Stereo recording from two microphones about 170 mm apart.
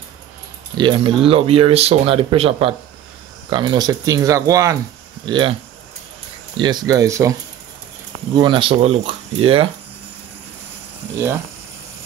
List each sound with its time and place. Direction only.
0.7 s speech: 30° right (ahead or behind)
8.4 s speech: 30° right (ahead or behind)